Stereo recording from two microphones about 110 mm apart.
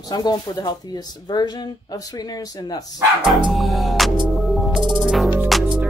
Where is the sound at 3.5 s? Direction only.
Centre (ahead or behind).